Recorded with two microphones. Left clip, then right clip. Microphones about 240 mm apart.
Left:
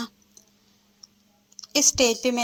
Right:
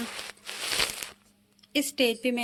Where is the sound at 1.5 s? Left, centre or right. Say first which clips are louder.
Left 6 dB; centre.